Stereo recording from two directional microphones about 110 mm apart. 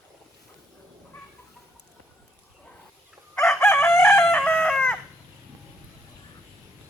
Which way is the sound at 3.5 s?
20° left (ahead or behind).